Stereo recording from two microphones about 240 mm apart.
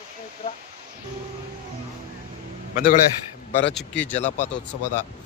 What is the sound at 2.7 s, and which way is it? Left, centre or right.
Speech, left.